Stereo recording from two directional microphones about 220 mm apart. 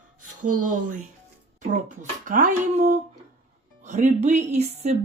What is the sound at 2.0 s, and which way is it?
Speech, 35° right (ahead or behind).